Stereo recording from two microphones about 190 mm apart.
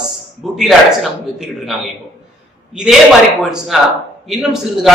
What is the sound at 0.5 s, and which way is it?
A man's voice, centre (ahead or behind).